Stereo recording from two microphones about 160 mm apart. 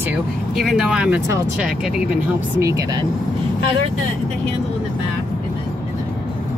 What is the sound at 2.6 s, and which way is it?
Speech, 20° right (ahead or behind).